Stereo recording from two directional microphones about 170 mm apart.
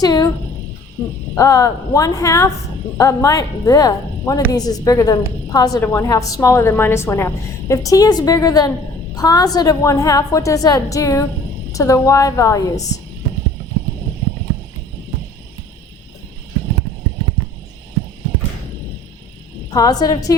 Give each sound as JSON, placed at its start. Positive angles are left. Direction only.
{"t": 0.0, "sound": "a sound", "side_deg": 20}
{"t": 1.4, "sound": "a woman's voice", "side_deg": 20}
{"t": 19.7, "sound": "a woman's voice", "side_deg": 20}